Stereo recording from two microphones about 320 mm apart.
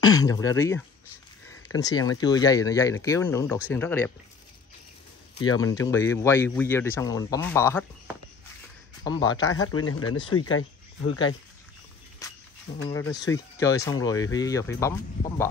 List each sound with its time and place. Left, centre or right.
0.0 s speech: centre
5.5 s speech: centre
9.0 s speech: centre
9.7 s speech: left
12.9 s speech: centre